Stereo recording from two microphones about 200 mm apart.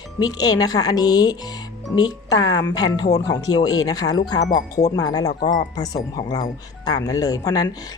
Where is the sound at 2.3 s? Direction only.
70° left (ahead or behind).